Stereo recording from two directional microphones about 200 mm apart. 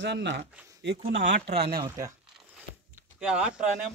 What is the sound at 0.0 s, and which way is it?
Speech, 60° right (ahead or behind).